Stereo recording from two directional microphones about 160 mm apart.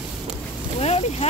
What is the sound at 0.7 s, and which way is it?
Boat, 40° left (ahead or behind).